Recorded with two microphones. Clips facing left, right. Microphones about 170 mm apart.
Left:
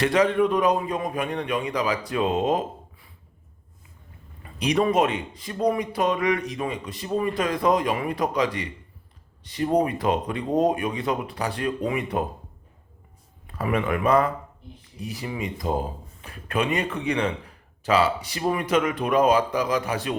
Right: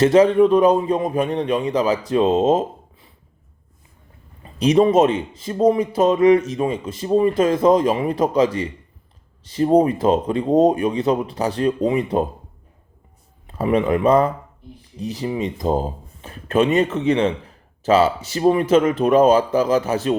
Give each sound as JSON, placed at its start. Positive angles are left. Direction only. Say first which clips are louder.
{"t": 0.1, "sound": "speech", "louder": "right 7 dB", "side_deg": -30}
{"t": 4.4, "sound": "speech", "louder": "right 7 dB", "side_deg": -25}
{"t": 13.5, "sound": "speech", "louder": "right 7 dB", "side_deg": -25}